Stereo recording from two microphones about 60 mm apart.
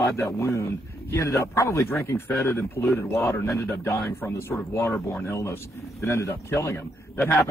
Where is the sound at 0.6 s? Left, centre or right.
Left.